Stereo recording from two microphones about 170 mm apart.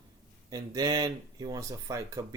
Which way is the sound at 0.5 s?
20° right (ahead or behind).